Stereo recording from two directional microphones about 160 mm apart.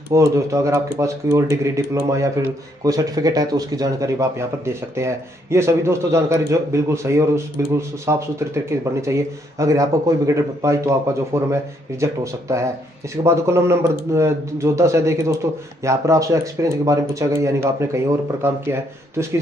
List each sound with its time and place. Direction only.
0.1 s speech: 20° right (ahead or behind)